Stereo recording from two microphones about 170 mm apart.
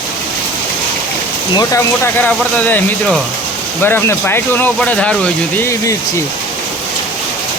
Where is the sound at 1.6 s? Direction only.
15° left (ahead or behind).